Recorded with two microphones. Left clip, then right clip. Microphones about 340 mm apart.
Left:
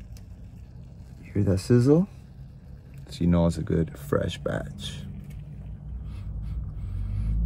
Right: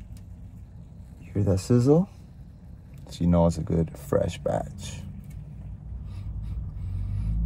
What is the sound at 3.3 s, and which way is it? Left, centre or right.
Speech, right.